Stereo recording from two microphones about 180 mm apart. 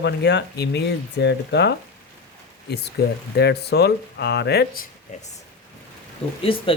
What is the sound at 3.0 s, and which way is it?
Speech, 65° left (ahead or behind).